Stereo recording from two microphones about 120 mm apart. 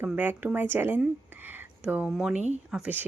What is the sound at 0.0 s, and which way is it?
Speech, 15° right (ahead or behind).